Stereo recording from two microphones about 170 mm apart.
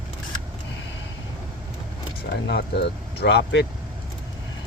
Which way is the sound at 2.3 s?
75° left (ahead or behind).